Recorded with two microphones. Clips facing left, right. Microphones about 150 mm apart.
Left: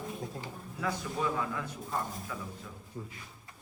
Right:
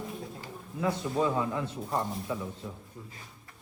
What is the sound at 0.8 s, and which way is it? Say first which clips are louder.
A man's voice: right 5 dB; 25° right (ahead or behind).